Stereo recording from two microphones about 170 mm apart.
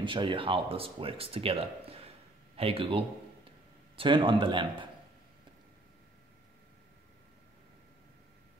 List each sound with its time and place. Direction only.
0.0 s speech: 30° right (ahead or behind)